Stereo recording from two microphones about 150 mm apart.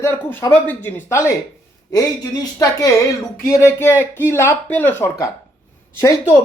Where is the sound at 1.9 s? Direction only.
25° left (ahead or behind).